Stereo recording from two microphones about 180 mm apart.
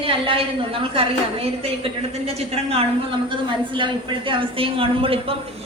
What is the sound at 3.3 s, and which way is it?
A woman's voice, 25° right (ahead or behind).